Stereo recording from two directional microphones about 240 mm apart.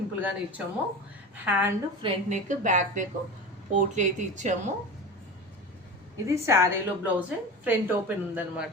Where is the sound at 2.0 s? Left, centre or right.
Right.